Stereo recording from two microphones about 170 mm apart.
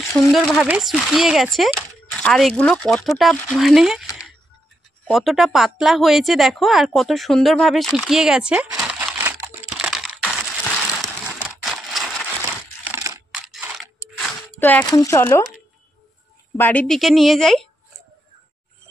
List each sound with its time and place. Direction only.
0.1 s speech: centre (ahead or behind)
5.0 s speech: centre (ahead or behind)
8.8 s a sound: 15° right (ahead or behind)
9.8 s computer keyboard: 5° right (ahead or behind)
11.3 s crushing: 5° right (ahead or behind)
12.9 s computer keyboard: 15° right (ahead or behind)
13.3 s a sound: 5° right (ahead or behind)
14.6 s speech: 10° left (ahead or behind)
16.5 s speech: 10° left (ahead or behind)